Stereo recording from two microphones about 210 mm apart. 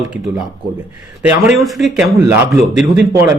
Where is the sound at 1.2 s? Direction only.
5° right (ahead or behind).